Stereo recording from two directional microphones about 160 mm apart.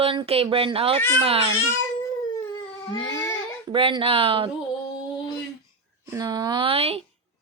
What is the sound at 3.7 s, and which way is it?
Speech, 30° right (ahead or behind).